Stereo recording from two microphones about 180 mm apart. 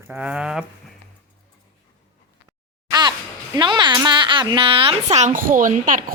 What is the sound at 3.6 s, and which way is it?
Speech, 25° right (ahead or behind).